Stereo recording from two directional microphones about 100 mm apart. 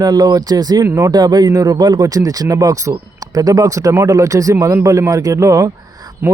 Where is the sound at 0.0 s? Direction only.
40° right (ahead or behind).